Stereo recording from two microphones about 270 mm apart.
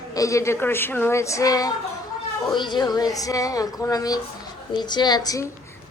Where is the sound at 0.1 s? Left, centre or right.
Centre.